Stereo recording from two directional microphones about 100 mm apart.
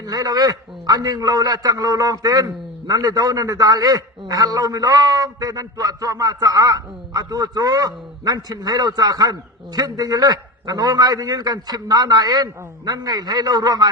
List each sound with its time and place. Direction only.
0.0 s a man's voice: 40° right (ahead or behind)